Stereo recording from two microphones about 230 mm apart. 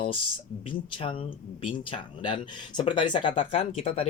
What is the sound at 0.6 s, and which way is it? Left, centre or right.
Speech, left.